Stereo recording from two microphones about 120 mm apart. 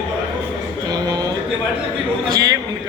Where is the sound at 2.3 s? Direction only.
30° right (ahead or behind).